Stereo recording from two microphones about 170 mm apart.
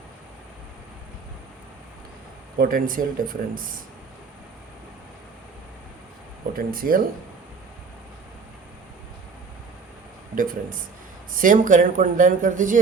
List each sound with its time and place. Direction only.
2.6 s speech: 55° right (ahead or behind)
6.6 s speech: 55° right (ahead or behind)
10.3 s speech: 55° right (ahead or behind)